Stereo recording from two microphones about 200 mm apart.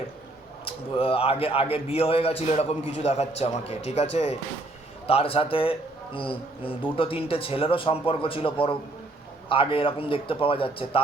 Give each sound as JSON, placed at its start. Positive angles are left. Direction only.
{"t": 0.6, "sound": "speech", "side_deg": 30}